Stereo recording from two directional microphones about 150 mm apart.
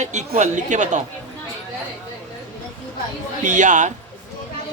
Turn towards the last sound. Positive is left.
turn(degrees=-55)  # may be behind; listen again after turning